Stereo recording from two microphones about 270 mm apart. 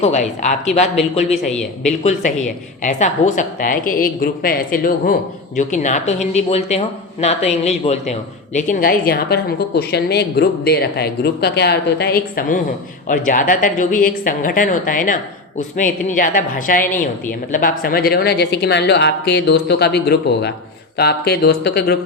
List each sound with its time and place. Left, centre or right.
0.0 s speech: left
2.8 s a woman's voice: left